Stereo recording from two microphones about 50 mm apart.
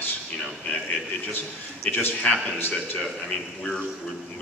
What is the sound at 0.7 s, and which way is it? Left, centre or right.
Speech, left.